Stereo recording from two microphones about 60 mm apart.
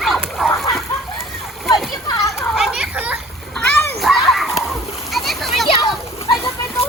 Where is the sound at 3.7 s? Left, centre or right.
Left.